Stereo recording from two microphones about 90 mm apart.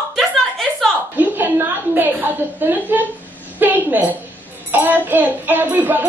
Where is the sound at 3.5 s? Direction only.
20° right (ahead or behind).